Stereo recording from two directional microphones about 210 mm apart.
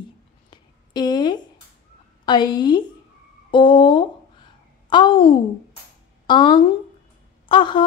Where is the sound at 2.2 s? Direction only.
20° left (ahead or behind).